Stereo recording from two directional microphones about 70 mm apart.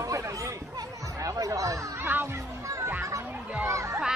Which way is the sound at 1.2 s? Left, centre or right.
Right.